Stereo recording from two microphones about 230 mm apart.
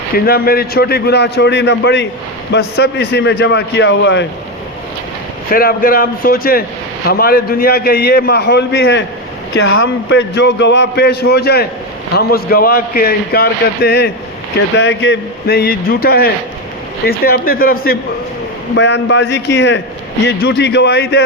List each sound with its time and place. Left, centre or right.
0.3 s a man's voice: left
5.5 s a man's voice: left